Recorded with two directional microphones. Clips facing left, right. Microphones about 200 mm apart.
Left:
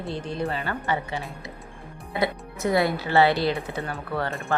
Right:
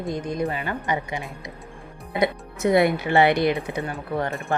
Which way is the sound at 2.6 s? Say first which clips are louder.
Right 4 dB; 20° right (ahead or behind).